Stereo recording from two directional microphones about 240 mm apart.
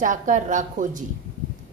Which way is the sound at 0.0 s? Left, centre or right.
Right.